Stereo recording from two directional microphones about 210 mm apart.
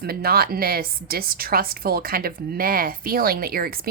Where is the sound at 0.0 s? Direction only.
45° right (ahead or behind).